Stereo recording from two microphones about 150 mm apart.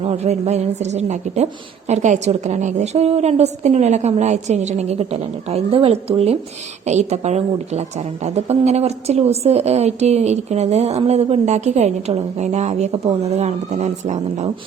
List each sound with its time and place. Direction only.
0.0 s a woman's voice: 45° right (ahead or behind)